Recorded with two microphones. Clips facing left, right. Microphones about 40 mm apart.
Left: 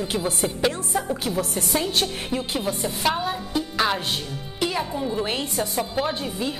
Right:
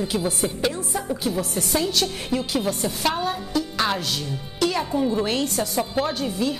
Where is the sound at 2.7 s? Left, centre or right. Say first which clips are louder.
Even; centre.